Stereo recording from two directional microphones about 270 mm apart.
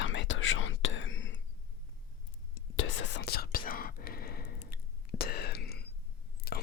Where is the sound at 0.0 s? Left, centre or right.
Left.